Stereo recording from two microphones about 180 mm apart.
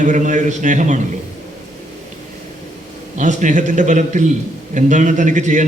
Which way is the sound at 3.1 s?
45° right (ahead or behind).